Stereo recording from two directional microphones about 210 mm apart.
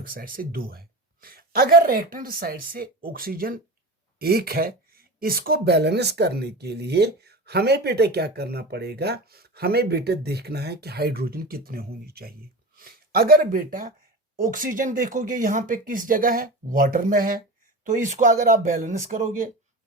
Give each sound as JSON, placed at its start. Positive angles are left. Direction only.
{"t": 0.1, "sound": "speech", "side_deg": -45}